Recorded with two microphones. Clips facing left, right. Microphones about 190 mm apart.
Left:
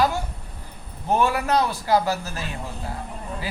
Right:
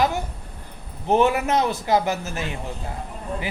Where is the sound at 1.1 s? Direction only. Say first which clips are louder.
Right 2 dB; 20° right (ahead or behind).